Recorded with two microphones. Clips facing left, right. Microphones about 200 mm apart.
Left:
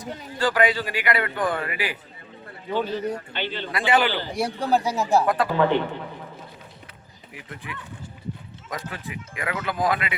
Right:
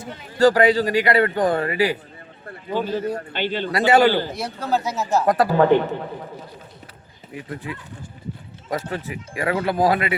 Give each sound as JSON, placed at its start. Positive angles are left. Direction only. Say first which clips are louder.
{"t": 0.3, "sound": "speech", "louder": "right 7 dB", "side_deg": -40}
{"t": 3.3, "sound": "a man's voice", "louder": "right 6 dB", "side_deg": -45}
{"t": 4.3, "sound": "speech", "louder": "left 1 dB", "side_deg": 15}
{"t": 5.2, "sound": "speech", "louder": "right 4 dB", "side_deg": -40}
{"t": 7.3, "sound": "speech", "louder": "right 7 dB", "side_deg": -30}